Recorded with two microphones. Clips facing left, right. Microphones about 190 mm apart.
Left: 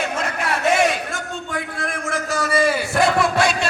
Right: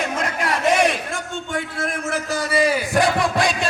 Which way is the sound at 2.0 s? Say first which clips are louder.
Left 2 dB; 35° right (ahead or behind).